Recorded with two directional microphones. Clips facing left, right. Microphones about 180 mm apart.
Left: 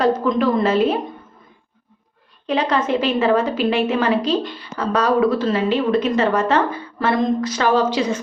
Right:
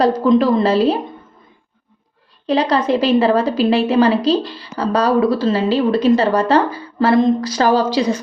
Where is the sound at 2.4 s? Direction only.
35° right (ahead or behind).